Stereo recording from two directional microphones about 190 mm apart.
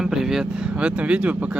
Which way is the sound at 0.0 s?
Centre (ahead or behind).